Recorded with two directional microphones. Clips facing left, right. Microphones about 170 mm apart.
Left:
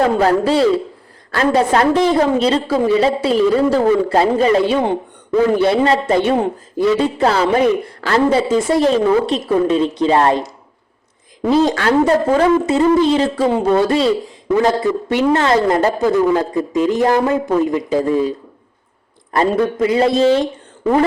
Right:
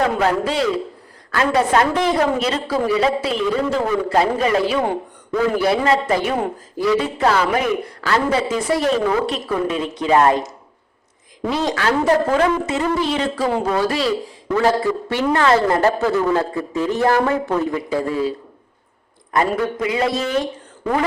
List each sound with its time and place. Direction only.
0.0 s a man's voice: 35° left (ahead or behind)
11.4 s a man's voice: 30° left (ahead or behind)
19.3 s a man's voice: 30° left (ahead or behind)